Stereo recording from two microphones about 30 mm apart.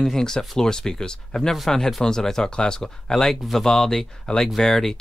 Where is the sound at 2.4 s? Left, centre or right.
Left.